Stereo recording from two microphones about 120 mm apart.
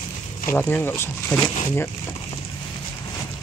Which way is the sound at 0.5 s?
15° left (ahead or behind).